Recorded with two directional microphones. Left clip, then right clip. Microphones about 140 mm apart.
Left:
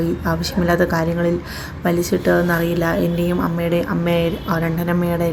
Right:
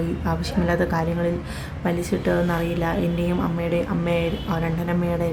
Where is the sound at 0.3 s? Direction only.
15° left (ahead or behind).